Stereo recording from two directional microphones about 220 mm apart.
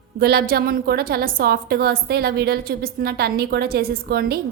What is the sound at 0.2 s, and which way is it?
A woman's voice, 45° right (ahead or behind).